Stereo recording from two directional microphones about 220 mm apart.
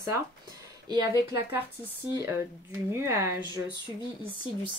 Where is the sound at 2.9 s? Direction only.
10° right (ahead or behind).